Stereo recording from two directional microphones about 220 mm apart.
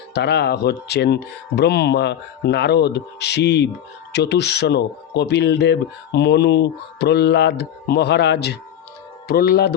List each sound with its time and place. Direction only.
0.1 s speech: 50° left (ahead or behind)